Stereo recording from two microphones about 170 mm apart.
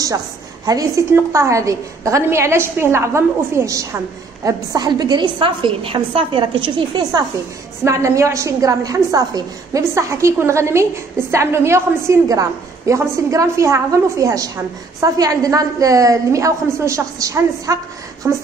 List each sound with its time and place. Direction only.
0.7 s a woman's voice: 20° right (ahead or behind)